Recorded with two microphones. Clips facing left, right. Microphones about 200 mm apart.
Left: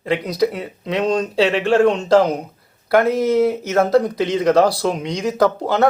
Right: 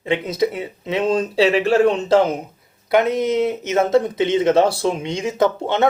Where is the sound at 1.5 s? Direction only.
35° right (ahead or behind).